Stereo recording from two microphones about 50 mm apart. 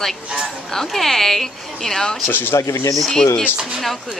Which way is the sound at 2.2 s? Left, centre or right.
Left.